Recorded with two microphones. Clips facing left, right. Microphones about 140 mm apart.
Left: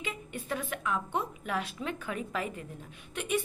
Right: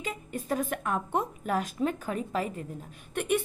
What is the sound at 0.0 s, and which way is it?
A woman's voice, 40° right (ahead or behind).